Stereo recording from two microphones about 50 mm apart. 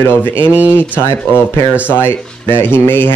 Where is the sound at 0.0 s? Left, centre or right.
Left.